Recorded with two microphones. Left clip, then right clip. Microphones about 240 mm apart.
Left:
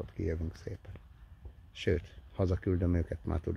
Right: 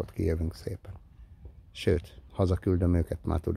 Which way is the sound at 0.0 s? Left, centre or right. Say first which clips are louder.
Right 6 dB; right.